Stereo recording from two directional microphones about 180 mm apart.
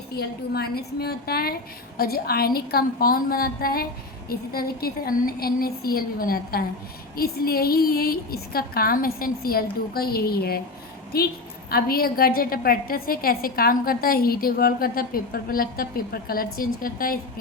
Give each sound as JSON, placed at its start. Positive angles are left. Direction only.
{"t": 0.1, "sound": "a woman's voice", "side_deg": 60}